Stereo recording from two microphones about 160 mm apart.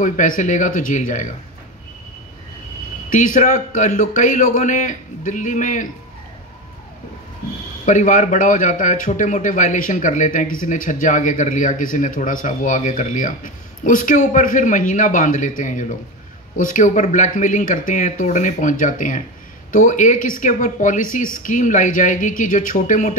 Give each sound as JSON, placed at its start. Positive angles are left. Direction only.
{"t": 0.0, "sound": "a man's voice", "side_deg": 50}
{"t": 3.1, "sound": "a man's voice", "side_deg": 50}
{"t": 7.8, "sound": "a man's voice", "side_deg": 50}